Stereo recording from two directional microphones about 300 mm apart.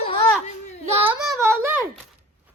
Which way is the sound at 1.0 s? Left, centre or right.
Centre.